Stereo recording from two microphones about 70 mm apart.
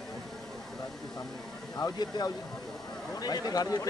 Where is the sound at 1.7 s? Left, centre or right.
Left.